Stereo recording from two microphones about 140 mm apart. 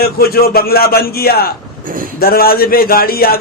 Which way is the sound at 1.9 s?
85° right.